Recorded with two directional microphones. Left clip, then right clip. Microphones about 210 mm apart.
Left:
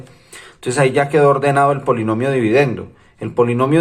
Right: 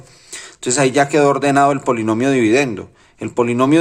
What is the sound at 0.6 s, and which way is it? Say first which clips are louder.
Speech: right 1 dB; 30° right (ahead or behind).